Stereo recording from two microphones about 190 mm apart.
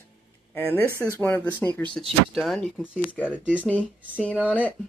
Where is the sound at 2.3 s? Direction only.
Centre (ahead or behind).